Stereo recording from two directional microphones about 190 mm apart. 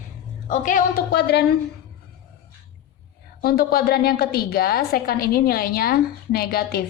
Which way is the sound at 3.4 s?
55° left (ahead or behind).